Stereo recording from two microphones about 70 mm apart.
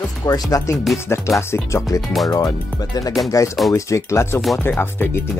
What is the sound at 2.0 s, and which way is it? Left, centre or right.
Speech, centre.